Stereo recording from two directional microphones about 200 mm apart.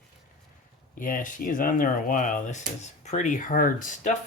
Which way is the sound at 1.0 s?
40° left (ahead or behind).